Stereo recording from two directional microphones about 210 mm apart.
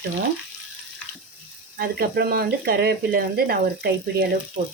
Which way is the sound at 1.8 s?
50° right (ahead or behind).